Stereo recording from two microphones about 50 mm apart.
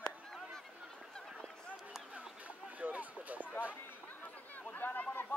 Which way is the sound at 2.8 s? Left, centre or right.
Right.